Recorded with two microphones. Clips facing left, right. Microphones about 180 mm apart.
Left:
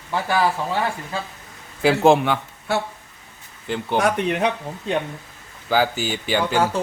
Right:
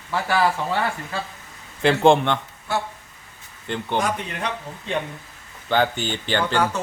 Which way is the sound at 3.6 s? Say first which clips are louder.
Left 2 dB; 5° left (ahead or behind).